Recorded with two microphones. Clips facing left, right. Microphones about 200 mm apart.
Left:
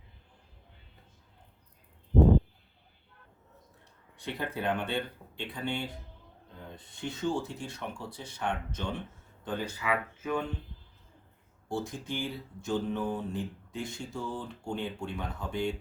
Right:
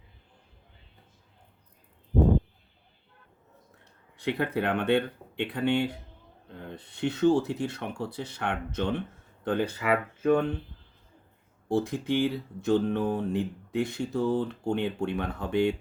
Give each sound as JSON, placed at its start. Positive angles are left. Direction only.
{"t": 4.2, "sound": "speech", "side_deg": -65}
{"t": 11.7, "sound": "speech", "side_deg": -65}